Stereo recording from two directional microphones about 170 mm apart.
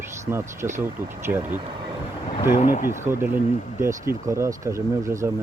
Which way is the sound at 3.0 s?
15° right (ahead or behind).